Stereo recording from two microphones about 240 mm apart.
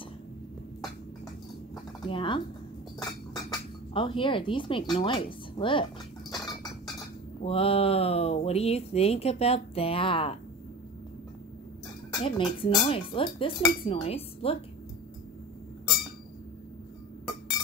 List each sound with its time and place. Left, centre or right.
2.0 s speech: left
3.1 s cutlery: centre
4.9 s speech: left
7.4 s speech: left
12.2 s speech: left